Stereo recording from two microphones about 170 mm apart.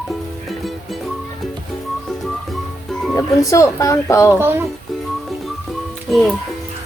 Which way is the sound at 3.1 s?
20° left (ahead or behind).